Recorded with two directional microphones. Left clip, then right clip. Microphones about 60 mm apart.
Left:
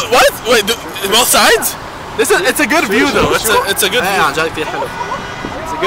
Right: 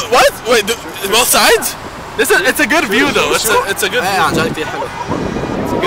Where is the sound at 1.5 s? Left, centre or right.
Right.